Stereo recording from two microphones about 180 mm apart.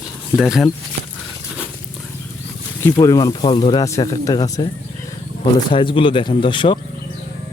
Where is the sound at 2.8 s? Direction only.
20° left (ahead or behind).